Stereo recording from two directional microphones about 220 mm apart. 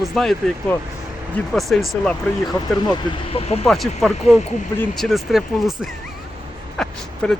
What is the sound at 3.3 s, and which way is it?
Speech, 25° left (ahead or behind).